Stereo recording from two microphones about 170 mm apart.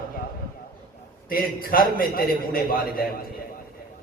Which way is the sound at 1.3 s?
60° left (ahead or behind).